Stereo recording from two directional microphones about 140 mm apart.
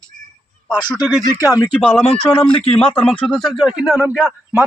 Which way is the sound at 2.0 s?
45° left (ahead or behind).